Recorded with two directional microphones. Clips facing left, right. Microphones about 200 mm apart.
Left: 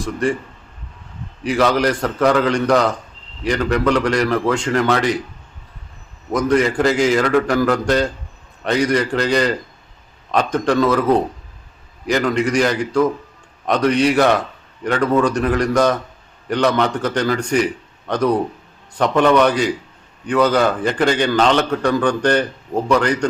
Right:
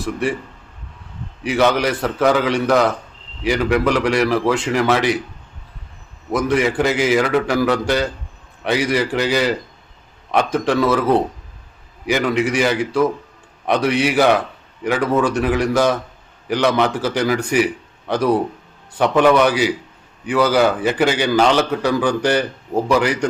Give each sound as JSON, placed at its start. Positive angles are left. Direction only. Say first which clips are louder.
{"t": 0.0, "sound": "a man's voice", "louder": "left 1 dB", "side_deg": -5}
{"t": 1.5, "sound": "a man's voice", "louder": "even", "side_deg": -5}
{"t": 6.3, "sound": "a man's voice", "louder": "left 1 dB", "side_deg": -5}
{"t": 12.0, "sound": "a man's voice", "louder": "even", "side_deg": -5}